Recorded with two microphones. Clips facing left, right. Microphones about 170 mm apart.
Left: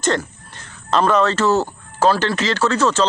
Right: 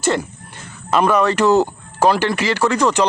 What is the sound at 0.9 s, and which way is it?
Speech, 10° right (ahead or behind).